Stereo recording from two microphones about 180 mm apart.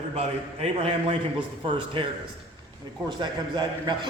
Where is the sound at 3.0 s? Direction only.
25° right (ahead or behind).